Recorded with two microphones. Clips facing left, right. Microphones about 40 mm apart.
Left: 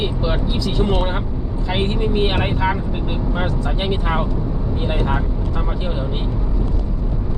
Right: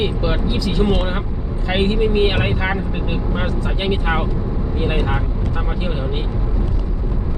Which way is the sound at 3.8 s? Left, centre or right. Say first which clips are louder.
Right 2 dB; centre.